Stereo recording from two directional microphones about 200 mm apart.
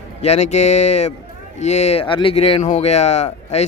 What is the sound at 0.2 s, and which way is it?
Speech, 35° left (ahead or behind).